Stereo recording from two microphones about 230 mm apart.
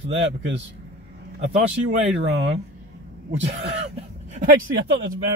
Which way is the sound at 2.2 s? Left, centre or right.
Right.